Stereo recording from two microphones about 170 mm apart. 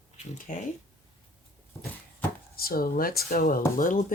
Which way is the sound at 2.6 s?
60° left (ahead or behind).